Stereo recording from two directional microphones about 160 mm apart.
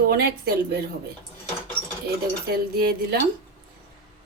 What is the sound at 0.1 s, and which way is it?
Speech, 80° right.